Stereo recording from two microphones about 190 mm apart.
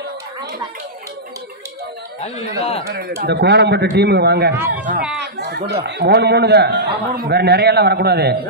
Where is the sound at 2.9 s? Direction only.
55° right (ahead or behind).